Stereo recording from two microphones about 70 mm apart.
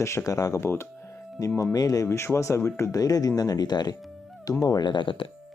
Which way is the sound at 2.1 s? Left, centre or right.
Left.